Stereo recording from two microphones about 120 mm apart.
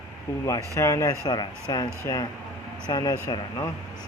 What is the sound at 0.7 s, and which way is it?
Speech, 25° left (ahead or behind).